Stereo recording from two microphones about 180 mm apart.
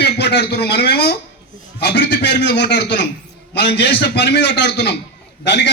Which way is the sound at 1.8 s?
70° left (ahead or behind).